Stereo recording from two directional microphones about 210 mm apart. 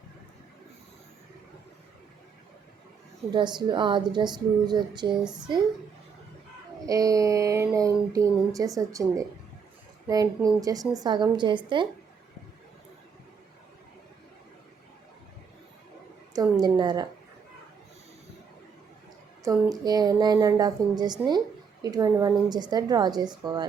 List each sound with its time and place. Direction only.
3.3 s a woman's voice: 20° right (ahead or behind)
5.2 s a child's voice: 5° right (ahead or behind)
6.8 s a woman's voice: 15° right (ahead or behind)
16.3 s a woman's voice: 20° right (ahead or behind)
19.5 s a woman's voice: 20° right (ahead or behind)